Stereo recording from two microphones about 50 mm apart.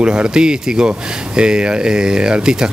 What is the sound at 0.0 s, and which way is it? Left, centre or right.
Speech, centre.